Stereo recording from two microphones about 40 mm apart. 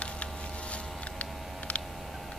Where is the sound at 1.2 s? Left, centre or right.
Left.